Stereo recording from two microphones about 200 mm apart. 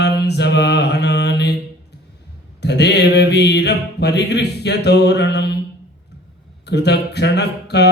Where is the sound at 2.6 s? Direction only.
55° left (ahead or behind).